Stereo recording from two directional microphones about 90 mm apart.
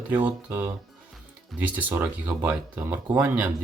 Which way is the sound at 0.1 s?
20° right (ahead or behind).